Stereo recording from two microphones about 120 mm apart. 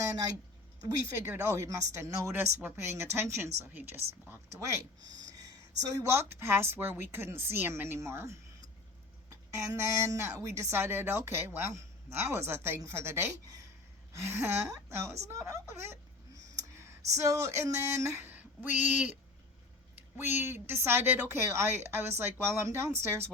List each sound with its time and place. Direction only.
0.8 s speech: 20° right (ahead or behind)
4.5 s a woman's voice: 25° right (ahead or behind)
16.6 s clicking: 25° right (ahead or behind)
17.2 s speech: 25° right (ahead or behind)